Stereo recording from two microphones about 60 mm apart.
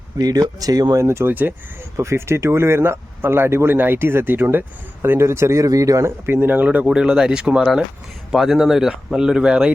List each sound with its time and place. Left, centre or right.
0.2 s speech: right
1.0 s speech: right
1.3 s speech: right
2.0 s speech: right
5.6 s speech: right
6.1 s speech: right
6.7 s speech: centre